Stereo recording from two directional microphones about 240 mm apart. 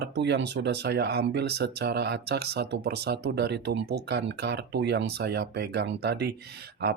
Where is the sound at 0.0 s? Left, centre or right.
Right.